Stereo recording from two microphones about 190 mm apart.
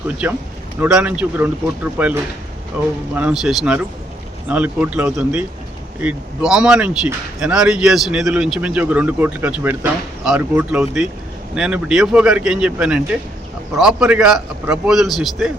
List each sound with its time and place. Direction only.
0.2 s speech: 10° right (ahead or behind)
3.2 s speech: 5° right (ahead or behind)